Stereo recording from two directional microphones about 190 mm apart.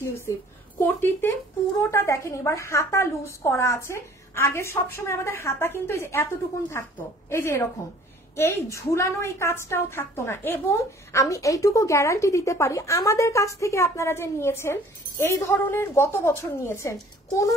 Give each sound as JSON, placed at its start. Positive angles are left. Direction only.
{"t": 0.3, "sound": "a woman's voice", "side_deg": 15}
{"t": 7.2, "sound": "a woman's voice", "side_deg": 15}